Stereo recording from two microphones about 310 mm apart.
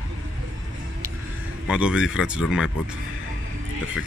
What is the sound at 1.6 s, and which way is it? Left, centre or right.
Speech, centre.